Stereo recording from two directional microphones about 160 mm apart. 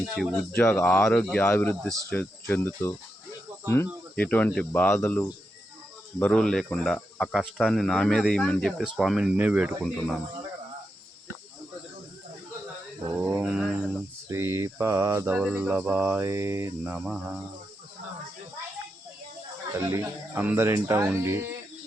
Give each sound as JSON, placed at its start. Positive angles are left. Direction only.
{"t": 0.1, "sound": "speech", "side_deg": 0}
{"t": 0.5, "sound": "speech", "side_deg": 10}
{"t": 4.1, "sound": "speech", "side_deg": 10}
{"t": 13.1, "sound": "a sound", "side_deg": -10}
{"t": 14.3, "sound": "cricket", "side_deg": -15}
{"t": 19.9, "sound": "cricket", "side_deg": -15}